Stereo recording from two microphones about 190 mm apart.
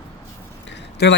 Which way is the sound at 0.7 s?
65° left (ahead or behind).